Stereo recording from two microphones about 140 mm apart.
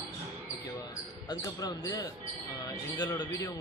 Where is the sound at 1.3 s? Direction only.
25° left (ahead or behind).